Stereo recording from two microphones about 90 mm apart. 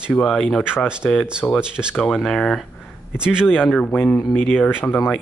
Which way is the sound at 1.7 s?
10° right (ahead or behind).